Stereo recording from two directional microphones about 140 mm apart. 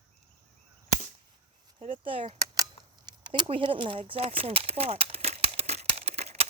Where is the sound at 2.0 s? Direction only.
40° right (ahead or behind).